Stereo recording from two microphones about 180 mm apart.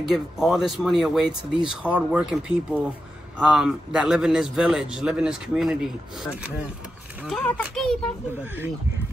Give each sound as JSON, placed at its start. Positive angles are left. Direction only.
{"t": 0.0, "sound": "speech", "side_deg": 0}
{"t": 7.2, "sound": "speech", "side_deg": 5}